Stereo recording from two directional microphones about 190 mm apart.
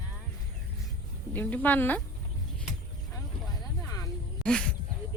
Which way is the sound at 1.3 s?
10° left (ahead or behind).